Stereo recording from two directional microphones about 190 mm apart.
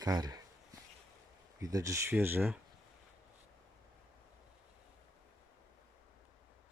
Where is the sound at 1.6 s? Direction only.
15° right (ahead or behind).